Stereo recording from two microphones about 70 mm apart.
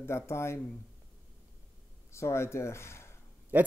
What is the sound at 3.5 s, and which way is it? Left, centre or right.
Speech, right.